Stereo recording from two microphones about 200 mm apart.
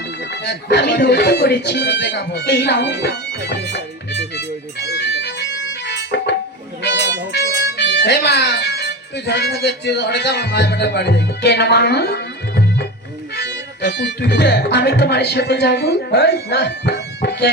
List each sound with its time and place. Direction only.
0.4 s speech: 55° left (ahead or behind)
4.8 s music: 60° left (ahead or behind)
7.3 s speech: 60° left (ahead or behind)
13.3 s music: 55° left (ahead or behind)